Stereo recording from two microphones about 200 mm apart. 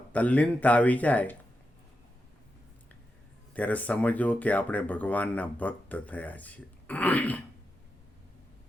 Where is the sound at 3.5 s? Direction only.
5° left (ahead or behind).